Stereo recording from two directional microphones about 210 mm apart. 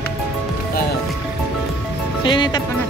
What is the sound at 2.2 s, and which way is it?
Speech, 20° left (ahead or behind).